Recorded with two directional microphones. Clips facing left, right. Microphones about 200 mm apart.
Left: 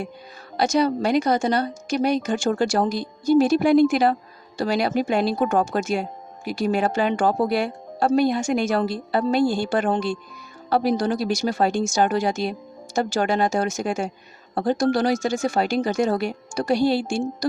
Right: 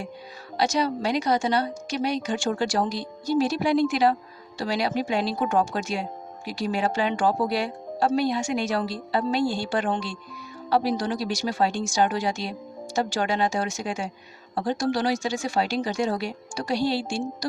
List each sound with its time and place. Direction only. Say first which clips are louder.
0.5 s speech: left 4 dB; 50° left (ahead or behind)